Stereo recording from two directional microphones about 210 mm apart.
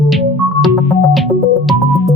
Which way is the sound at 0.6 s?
Centre (ahead or behind).